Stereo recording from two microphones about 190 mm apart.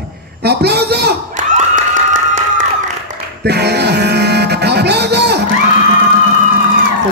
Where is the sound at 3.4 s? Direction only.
60° right (ahead or behind).